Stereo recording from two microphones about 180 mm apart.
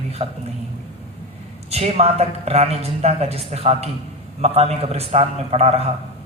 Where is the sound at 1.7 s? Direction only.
35° right (ahead or behind).